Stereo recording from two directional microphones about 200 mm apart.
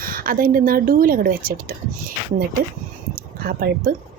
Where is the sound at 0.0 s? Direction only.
45° right (ahead or behind).